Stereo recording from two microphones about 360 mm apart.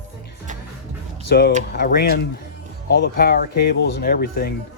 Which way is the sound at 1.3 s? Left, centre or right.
Left.